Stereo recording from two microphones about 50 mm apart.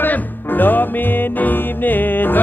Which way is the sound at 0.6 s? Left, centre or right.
Left.